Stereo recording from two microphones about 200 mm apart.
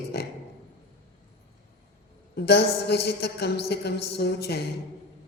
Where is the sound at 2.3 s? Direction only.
55° left (ahead or behind).